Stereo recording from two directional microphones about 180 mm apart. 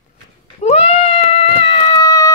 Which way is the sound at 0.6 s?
35° left (ahead or behind).